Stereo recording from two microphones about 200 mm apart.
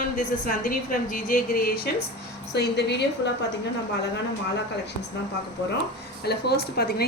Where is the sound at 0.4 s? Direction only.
45° left (ahead or behind).